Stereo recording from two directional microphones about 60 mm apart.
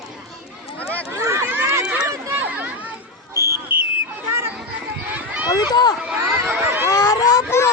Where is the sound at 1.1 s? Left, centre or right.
Right.